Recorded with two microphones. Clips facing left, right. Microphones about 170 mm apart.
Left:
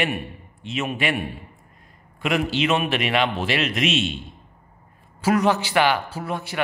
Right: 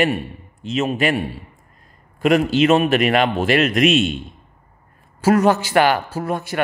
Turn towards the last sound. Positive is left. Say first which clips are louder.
# right 5 dB
turn(degrees=-50)  # may be behind; listen again after turning